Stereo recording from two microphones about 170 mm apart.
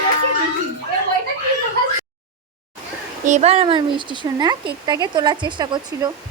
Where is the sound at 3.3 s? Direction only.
40° right (ahead or behind).